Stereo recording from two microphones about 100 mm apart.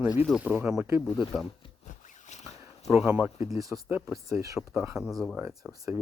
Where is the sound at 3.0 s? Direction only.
15° right (ahead or behind).